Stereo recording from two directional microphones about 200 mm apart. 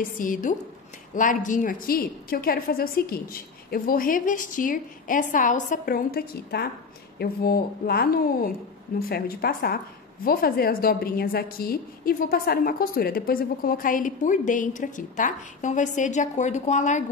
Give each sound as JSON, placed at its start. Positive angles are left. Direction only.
{"t": 0.2, "sound": "a woman's voice", "side_deg": 40}